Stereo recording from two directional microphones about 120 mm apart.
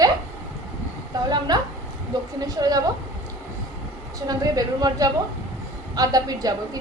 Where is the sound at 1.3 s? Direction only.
35° right (ahead or behind).